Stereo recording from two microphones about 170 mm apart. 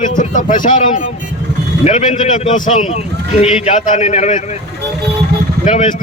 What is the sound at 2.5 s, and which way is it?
Speech, 45° left (ahead or behind).